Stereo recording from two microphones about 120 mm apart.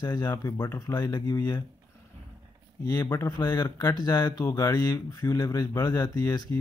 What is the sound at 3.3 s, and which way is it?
Speech, 35° left (ahead or behind).